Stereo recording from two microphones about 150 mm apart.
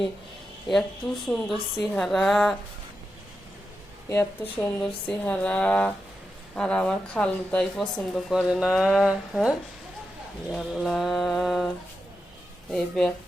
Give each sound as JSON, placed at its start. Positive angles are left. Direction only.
{"t": 0.7, "sound": "speech", "side_deg": 0}
{"t": 4.1, "sound": "speech", "side_deg": 15}
{"t": 12.7, "sound": "speech", "side_deg": 5}